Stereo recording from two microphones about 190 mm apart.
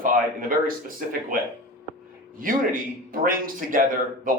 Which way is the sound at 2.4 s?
45° right (ahead or behind).